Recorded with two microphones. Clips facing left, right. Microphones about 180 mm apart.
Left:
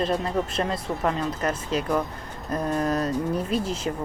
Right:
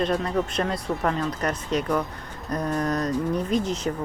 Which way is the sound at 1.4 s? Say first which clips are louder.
Even; 25° left (ahead or behind).